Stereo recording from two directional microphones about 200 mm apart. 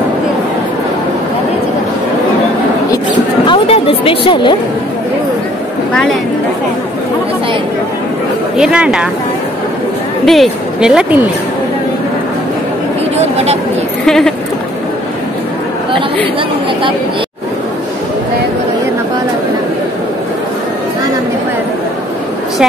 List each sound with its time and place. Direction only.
2.9 s a sound: 25° left (ahead or behind)
8.5 s speech: 5° right (ahead or behind)
10.2 s a woman's voice: centre (ahead or behind)
14.0 s speech: centre (ahead or behind)